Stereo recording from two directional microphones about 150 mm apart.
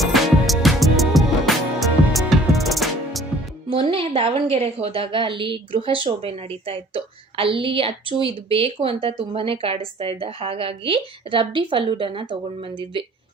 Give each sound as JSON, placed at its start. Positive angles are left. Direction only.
{"t": 0.0, "sound": "music", "side_deg": 0}
{"t": 3.7, "sound": "a woman's voice", "side_deg": -35}